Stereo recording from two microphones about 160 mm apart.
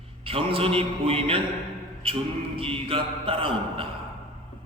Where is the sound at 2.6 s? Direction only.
35° right (ahead or behind).